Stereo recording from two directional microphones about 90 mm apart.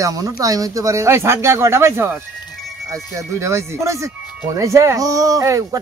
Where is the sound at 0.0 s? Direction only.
40° right (ahead or behind).